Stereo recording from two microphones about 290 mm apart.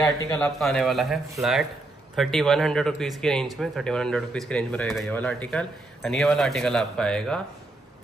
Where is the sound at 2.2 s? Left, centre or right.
Centre.